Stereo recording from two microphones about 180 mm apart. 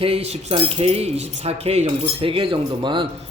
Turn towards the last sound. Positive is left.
turn(degrees=-25)  # may be behind; listen again after turning